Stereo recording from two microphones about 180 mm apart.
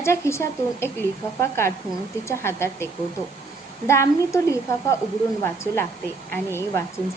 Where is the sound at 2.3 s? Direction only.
15° left (ahead or behind).